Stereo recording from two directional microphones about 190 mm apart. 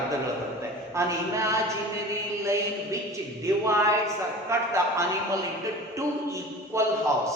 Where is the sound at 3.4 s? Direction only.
15° right (ahead or behind).